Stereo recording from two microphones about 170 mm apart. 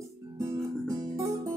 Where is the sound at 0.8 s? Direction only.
20° right (ahead or behind).